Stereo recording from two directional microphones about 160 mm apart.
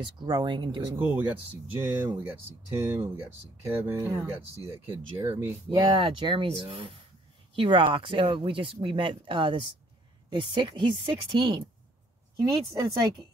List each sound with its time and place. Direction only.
0.0 s speech: 25° right (ahead or behind)
0.9 s speech: 10° right (ahead or behind)
5.8 s speech: 35° right (ahead or behind)
12.4 s speech: 20° right (ahead or behind)